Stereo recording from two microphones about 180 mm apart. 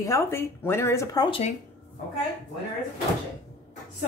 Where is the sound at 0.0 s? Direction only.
15° left (ahead or behind).